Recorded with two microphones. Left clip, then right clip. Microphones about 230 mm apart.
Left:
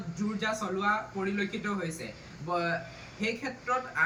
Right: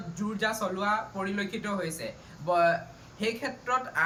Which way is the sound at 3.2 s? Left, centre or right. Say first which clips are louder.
Right 2 dB; centre.